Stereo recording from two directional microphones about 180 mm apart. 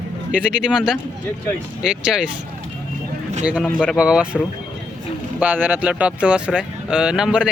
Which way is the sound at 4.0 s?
5° right (ahead or behind).